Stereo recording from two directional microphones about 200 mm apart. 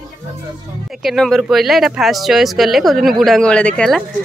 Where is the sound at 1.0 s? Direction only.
Centre (ahead or behind).